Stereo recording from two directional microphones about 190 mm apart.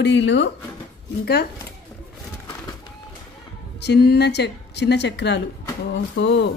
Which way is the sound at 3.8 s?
60° left (ahead or behind).